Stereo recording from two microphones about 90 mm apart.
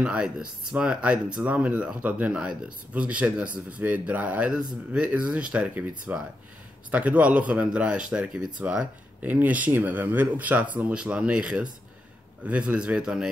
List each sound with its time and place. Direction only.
0.0 s speech: 10° right (ahead or behind)